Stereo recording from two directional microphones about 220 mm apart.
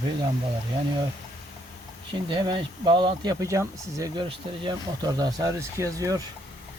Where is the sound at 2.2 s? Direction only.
20° right (ahead or behind).